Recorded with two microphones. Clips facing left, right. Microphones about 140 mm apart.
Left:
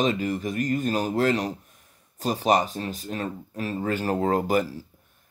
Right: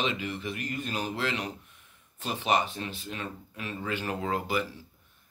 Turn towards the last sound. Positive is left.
turn(degrees=40)  # may be behind; listen again after turning